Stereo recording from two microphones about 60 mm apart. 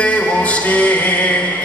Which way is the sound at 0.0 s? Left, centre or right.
Left.